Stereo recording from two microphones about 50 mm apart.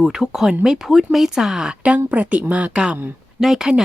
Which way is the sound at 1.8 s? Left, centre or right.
Right.